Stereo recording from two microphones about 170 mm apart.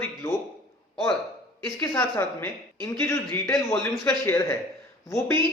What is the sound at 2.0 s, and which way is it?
Speech, 10° left (ahead or behind).